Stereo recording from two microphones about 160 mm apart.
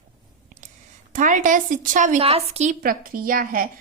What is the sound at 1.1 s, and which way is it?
A woman's voice, 55° right (ahead or behind).